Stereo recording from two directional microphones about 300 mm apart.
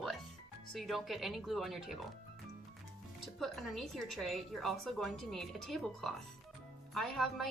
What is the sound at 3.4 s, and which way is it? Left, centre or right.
A woman's voice, centre.